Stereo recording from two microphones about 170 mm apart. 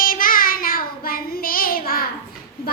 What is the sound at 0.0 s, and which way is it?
Child singing, 55° left (ahead or behind).